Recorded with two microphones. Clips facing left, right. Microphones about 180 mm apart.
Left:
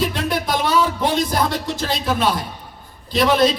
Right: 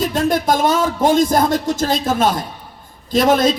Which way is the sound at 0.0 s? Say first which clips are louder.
Right 4 dB; 45° right (ahead or behind).